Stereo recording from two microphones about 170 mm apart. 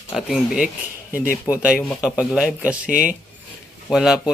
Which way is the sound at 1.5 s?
5° right (ahead or behind).